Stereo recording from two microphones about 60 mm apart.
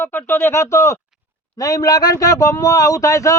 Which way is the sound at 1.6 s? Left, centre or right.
Left.